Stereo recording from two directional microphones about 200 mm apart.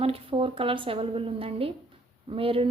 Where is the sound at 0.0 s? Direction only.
30° right (ahead or behind).